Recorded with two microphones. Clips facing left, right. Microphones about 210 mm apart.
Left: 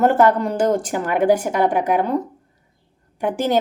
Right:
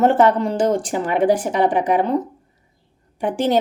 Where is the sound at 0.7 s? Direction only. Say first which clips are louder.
Even; 10° left (ahead or behind).